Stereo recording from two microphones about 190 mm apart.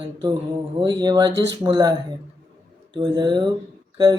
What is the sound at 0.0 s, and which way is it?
Speech, 25° right (ahead or behind).